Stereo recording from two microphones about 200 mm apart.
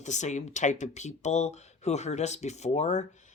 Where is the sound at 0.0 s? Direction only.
35° left (ahead or behind).